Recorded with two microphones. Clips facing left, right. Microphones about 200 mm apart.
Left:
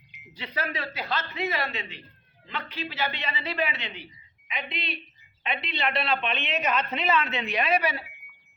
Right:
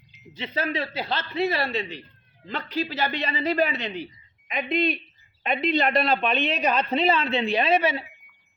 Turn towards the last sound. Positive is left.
turn(degrees=-25)  # may be behind; listen again after turning